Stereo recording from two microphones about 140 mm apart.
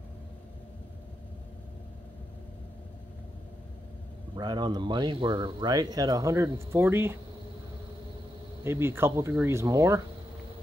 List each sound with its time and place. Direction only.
4.4 s speech: 30° right (ahead or behind)
8.6 s speech: 15° right (ahead or behind)